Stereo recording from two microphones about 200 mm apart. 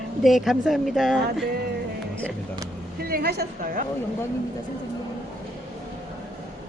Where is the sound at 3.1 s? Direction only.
50° right (ahead or behind).